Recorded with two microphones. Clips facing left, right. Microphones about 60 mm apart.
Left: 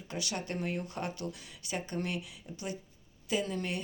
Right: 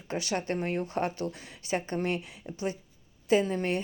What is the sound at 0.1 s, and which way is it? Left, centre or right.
Speech, right.